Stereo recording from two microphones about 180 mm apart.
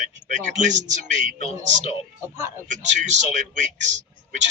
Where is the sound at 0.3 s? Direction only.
40° right (ahead or behind).